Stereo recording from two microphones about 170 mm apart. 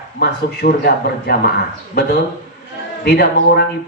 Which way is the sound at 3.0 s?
65° left (ahead or behind).